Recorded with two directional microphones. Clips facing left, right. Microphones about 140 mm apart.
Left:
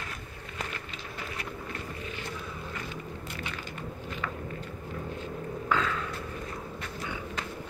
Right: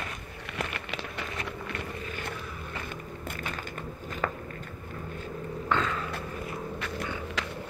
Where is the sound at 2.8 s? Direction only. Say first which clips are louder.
Right 1 dB; 50° right (ahead or behind).